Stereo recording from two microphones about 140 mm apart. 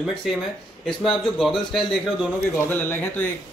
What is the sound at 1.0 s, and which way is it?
Speech, centre (ahead or behind).